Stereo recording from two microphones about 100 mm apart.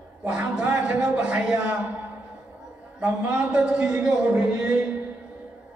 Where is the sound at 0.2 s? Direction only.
15° right (ahead or behind).